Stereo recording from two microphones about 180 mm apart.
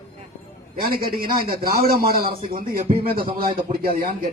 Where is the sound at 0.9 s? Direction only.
55° right (ahead or behind).